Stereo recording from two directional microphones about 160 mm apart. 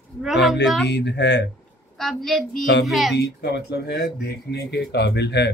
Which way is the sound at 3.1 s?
90° left.